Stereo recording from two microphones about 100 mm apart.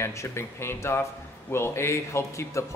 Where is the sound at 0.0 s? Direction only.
25° left (ahead or behind).